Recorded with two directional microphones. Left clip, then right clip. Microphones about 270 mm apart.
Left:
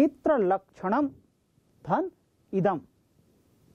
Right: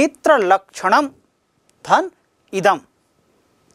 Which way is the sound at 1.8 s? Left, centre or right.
Centre.